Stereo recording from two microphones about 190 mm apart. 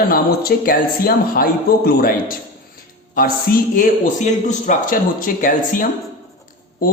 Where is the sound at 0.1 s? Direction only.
50° left (ahead or behind).